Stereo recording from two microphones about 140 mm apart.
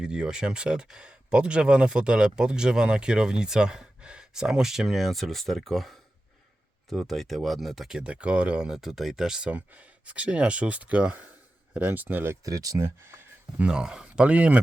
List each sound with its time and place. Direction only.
0.0 s speech: 5° right (ahead or behind); by 13.1 s 20° right (ahead or behind)
13.6 s speech: 5° right (ahead or behind)